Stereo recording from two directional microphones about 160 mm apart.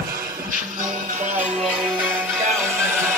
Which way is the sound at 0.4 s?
55° right (ahead or behind).